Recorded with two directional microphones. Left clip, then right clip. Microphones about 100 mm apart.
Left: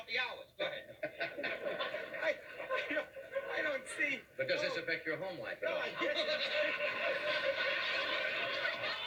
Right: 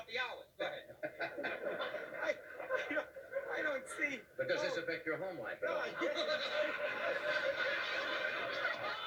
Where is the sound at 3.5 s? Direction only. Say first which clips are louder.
Left 1 dB; 40° left (ahead or behind).